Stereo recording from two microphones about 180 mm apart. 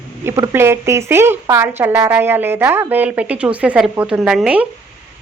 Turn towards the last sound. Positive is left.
turn(degrees=-5)  # may be behind; listen again after turning